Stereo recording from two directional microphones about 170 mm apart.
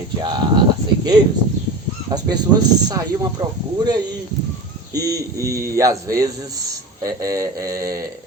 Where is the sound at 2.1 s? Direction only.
25° right (ahead or behind).